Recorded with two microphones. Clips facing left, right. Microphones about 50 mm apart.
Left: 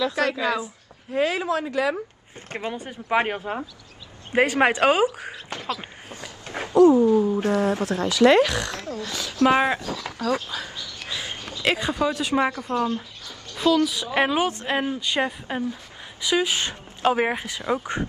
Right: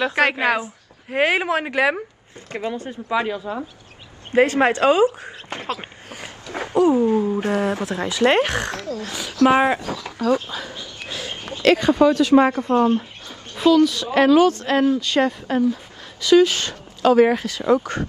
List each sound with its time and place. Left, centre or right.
0.0 s a woman's voice: right
2.5 s speech: left
3.1 s speech: left
4.3 s speech: centre
5.5 s speech: right
9.0 s speech: right
10.2 s speech: right
10.7 s dog: right
11.6 s speech: centre
12.5 s speech: right
14.1 s speech: left